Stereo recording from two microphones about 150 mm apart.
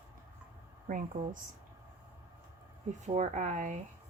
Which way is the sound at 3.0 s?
50° right (ahead or behind).